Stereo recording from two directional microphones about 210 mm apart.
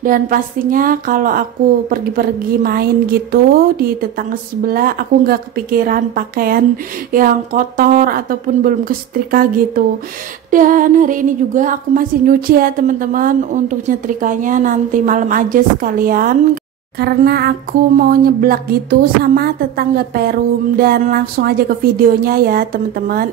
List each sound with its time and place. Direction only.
0.0 s a woman's voice: 40° right (ahead or behind)